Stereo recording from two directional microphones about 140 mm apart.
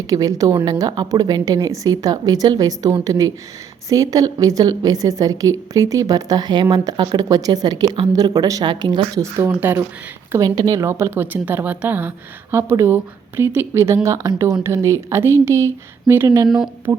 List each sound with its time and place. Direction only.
0.1 s a woman's voice: 25° right (ahead or behind)
9.2 s speech: 15° right (ahead or behind)
10.3 s a woman's voice: 30° right (ahead or behind)